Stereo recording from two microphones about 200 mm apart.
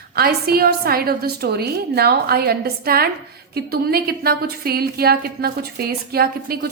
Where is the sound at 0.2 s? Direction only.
50° right (ahead or behind).